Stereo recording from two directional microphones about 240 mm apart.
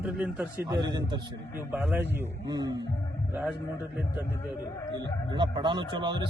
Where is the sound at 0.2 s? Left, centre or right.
Centre.